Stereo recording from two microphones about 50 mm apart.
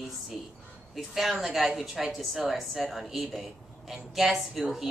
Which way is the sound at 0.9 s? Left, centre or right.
Centre.